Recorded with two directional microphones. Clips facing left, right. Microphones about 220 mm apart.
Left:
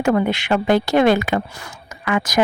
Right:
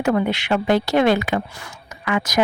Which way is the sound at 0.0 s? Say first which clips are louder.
Left 2 dB; 50° left (ahead or behind).